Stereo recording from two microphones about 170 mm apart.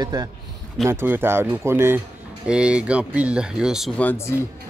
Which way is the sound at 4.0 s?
15° left (ahead or behind).